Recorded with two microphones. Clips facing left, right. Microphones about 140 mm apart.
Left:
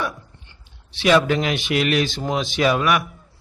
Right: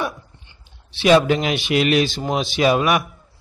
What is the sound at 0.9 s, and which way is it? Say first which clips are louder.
A man's voice: right 2 dB; 20° right (ahead or behind).